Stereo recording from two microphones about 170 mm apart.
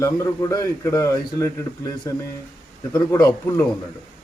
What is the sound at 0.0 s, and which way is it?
A man's voice, 20° left (ahead or behind).